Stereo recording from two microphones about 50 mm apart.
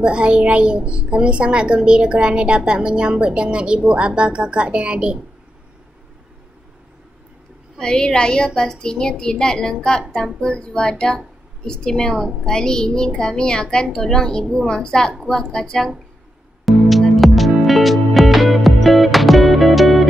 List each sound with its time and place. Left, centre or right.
0.0 s a child's voice: right
7.8 s child singing: centre
10.4 s a woman's voice: centre
12.1 s child singing: centre
16.7 s music: centre